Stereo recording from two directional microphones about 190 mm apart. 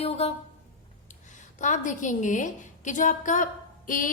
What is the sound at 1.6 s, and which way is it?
A woman's voice, 40° left (ahead or behind).